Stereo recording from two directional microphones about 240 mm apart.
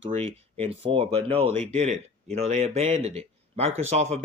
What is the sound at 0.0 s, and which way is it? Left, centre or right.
Speech, right.